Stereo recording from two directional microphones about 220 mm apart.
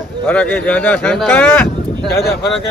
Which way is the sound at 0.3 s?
5° left (ahead or behind).